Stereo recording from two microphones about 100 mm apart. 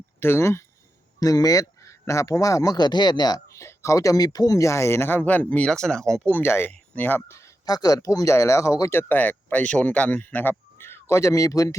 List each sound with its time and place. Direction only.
0.2 s speech: 25° left (ahead or behind)
1.2 s speech: 35° left (ahead or behind); by 6.3 s 5° left (ahead or behind)
6.3 s speech: 25° left (ahead or behind)
7.6 s speech: 40° left (ahead or behind)